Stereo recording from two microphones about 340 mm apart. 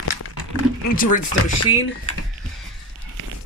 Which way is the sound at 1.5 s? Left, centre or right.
Left.